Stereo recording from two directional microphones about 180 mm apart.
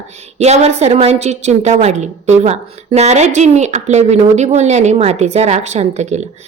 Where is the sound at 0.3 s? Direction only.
35° right (ahead or behind).